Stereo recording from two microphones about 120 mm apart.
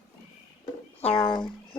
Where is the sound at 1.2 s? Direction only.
40° left (ahead or behind).